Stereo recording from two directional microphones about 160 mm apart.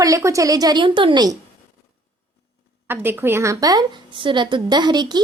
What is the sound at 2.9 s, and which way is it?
A woman's voice, 15° right (ahead or behind).